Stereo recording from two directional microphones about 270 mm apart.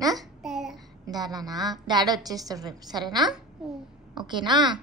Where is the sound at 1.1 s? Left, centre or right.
Centre.